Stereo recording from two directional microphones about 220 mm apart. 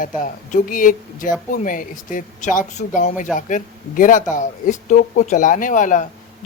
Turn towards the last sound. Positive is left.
turn(degrees=35)  # may be behind; listen again after turning